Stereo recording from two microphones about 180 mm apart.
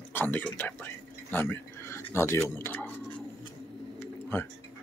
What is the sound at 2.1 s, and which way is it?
Speech, 15° left (ahead or behind).